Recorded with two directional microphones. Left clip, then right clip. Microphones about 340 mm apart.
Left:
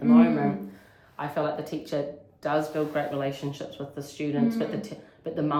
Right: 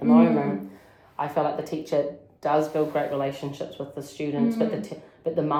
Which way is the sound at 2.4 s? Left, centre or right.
Centre.